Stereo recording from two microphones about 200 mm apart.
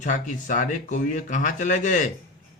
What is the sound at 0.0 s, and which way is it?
A man's voice, 40° left (ahead or behind).